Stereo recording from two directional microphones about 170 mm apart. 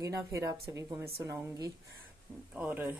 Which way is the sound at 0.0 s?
20° right (ahead or behind).